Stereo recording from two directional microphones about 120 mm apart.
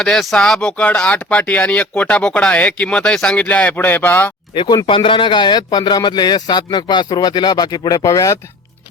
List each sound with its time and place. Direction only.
0.0 s speech: 5° left (ahead or behind)
4.5 s a man's voice: 45° left (ahead or behind)